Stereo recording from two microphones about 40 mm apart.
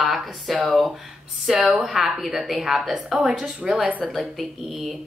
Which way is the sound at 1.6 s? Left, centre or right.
Centre.